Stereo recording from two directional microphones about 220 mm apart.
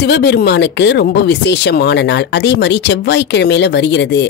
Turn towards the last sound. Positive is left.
turn(degrees=50)  # may be behind; listen again after turning